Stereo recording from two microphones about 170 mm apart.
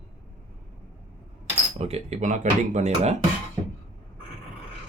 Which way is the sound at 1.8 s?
40° right (ahead or behind).